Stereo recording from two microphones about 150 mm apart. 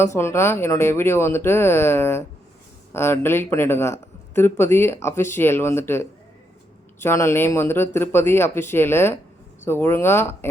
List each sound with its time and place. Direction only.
0.0 s speech: 15° left (ahead or behind)